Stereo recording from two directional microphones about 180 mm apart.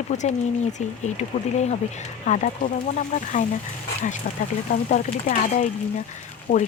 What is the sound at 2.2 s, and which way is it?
Speech, 45° left (ahead or behind).